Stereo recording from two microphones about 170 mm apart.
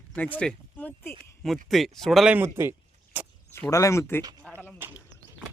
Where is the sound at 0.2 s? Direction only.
10° left (ahead or behind).